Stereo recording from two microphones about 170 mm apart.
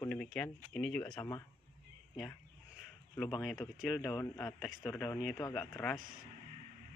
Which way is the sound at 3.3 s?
Centre (ahead or behind).